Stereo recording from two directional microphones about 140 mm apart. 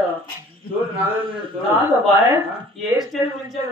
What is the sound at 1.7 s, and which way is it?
Speech, 15° right (ahead or behind).